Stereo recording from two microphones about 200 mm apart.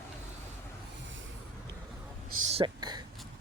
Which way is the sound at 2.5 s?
25° right (ahead or behind).